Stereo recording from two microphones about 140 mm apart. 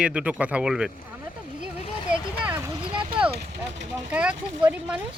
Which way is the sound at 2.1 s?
10° right (ahead or behind).